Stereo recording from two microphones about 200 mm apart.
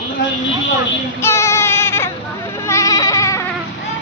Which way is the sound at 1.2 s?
15° left (ahead or behind).